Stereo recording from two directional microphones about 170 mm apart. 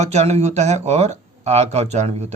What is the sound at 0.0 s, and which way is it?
Speech, 40° right (ahead or behind).